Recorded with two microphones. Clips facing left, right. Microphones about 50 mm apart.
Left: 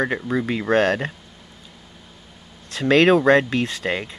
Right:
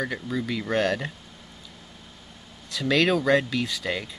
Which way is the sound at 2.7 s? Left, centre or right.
Left.